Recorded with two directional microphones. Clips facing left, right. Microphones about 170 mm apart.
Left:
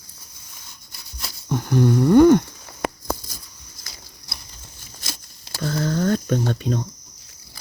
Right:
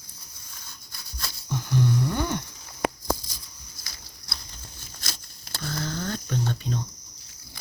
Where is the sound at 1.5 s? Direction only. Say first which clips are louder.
Left 7 dB; 50° left (ahead or behind).